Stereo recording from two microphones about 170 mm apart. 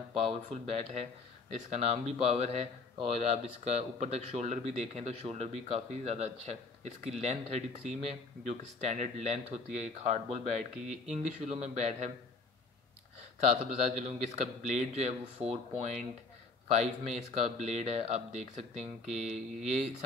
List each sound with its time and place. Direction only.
0.1 s speech: 35° right (ahead or behind)
13.4 s a man's voice: 45° right (ahead or behind)
17.3 s speech: 40° right (ahead or behind)
19.2 s speech: centre (ahead or behind)